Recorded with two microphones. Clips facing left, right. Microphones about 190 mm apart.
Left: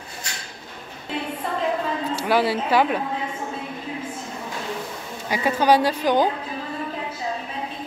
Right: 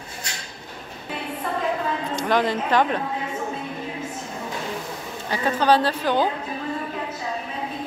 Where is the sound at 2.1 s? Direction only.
10° left (ahead or behind).